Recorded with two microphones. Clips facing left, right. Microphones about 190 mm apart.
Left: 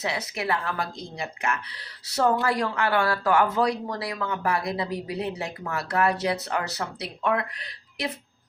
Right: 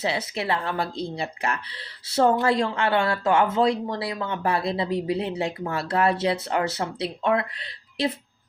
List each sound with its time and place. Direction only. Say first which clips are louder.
0.0 s speech: right 3 dB; 30° right (ahead or behind)